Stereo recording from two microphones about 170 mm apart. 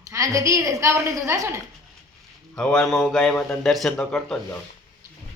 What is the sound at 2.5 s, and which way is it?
Speech, 5° left (ahead or behind).